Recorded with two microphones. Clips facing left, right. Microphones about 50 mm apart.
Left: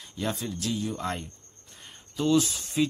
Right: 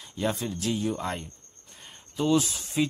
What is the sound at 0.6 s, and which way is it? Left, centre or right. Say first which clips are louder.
Speech: right 2 dB; right.